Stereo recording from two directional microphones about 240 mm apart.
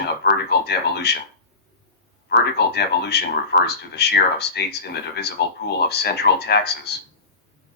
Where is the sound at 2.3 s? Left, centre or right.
Left.